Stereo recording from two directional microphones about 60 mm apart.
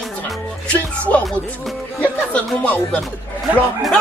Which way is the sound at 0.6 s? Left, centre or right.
Left.